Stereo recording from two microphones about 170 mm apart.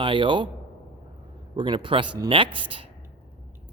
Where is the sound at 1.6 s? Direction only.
30° right (ahead or behind).